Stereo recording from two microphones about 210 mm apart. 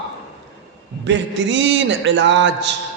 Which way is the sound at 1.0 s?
60° right (ahead or behind).